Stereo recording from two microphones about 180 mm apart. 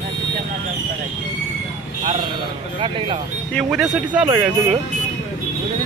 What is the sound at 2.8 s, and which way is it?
Speech, 30° right (ahead or behind).